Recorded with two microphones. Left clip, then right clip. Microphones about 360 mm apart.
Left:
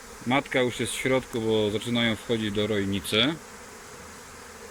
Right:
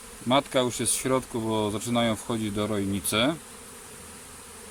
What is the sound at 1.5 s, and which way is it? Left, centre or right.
Speech, right.